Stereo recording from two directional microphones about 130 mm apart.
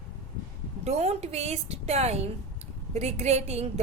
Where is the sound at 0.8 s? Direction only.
55° right (ahead or behind).